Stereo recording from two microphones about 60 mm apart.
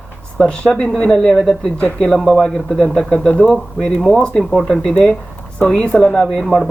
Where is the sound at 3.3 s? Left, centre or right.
Left.